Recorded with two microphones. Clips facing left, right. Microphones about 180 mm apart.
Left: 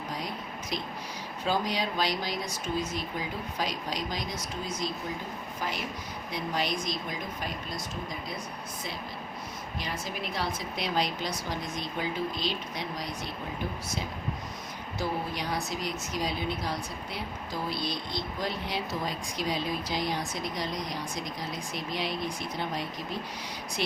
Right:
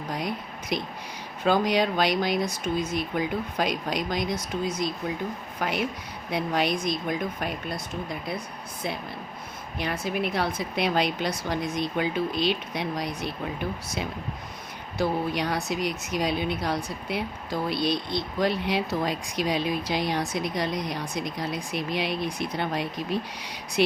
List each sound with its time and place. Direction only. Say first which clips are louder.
0.7 s a woman's voice: right 6 dB; 65° right (ahead or behind)
5.5 s a woman's voice: right 7 dB; 65° right (ahead or behind)
9.7 s a woman's voice: right 8 dB; 60° right (ahead or behind)
14.9 s a woman's voice: right 7 dB; 65° right (ahead or behind)